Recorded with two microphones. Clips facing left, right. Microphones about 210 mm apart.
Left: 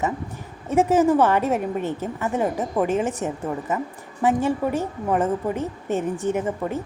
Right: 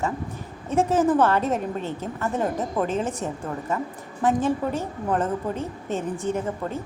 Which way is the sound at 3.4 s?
5° left (ahead or behind).